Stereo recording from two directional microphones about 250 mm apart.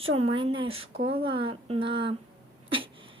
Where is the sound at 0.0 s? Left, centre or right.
Right.